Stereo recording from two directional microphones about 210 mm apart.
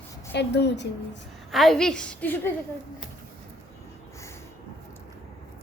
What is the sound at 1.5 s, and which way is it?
A woman's voice, centre (ahead or behind).